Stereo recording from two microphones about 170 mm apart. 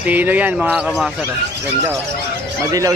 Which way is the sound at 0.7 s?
Centre (ahead or behind).